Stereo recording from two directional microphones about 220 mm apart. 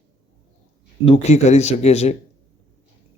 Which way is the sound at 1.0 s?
30° left (ahead or behind).